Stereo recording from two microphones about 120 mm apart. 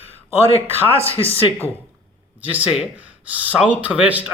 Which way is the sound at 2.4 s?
15° right (ahead or behind).